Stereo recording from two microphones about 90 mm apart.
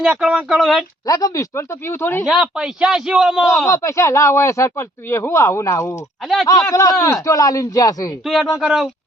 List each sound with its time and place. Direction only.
0.2 s a man's voice: 10° right (ahead or behind)
1.0 s speech: 40° left (ahead or behind)
2.2 s a man's voice: 5° right (ahead or behind)
3.7 s speech: 35° left (ahead or behind)
6.2 s a man's voice: 5° left (ahead or behind)
6.7 s speech: 35° left (ahead or behind)
8.2 s a man's voice: centre (ahead or behind)